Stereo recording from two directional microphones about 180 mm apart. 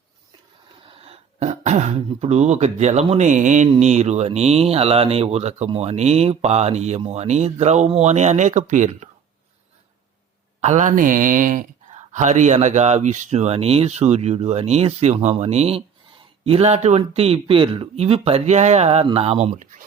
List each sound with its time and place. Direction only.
0.9 s speech: 35° right (ahead or behind)
10.6 s speech: 40° right (ahead or behind)